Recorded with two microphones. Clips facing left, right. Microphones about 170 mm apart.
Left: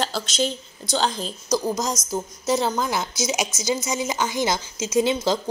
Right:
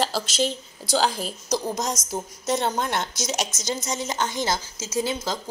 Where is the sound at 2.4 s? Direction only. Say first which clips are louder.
Left 2 dB; centre (ahead or behind).